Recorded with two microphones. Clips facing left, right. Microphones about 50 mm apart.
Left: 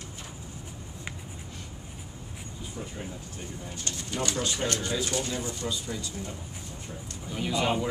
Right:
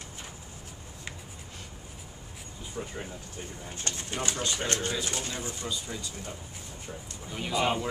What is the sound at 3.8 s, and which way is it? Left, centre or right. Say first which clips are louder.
Speech: left 1 dB; right.